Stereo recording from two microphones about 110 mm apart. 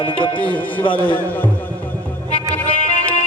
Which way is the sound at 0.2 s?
50° left (ahead or behind).